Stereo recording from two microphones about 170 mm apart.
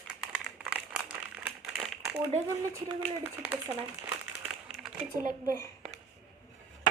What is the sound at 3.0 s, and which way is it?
Speech, 10° right (ahead or behind).